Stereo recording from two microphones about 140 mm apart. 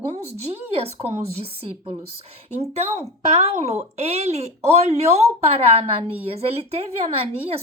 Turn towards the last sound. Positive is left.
turn(degrees=-50)  # may be behind; listen again after turning